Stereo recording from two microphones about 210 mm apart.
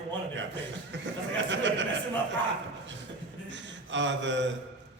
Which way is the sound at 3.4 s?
60° right (ahead or behind).